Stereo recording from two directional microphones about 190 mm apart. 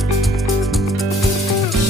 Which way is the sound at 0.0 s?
Centre (ahead or behind).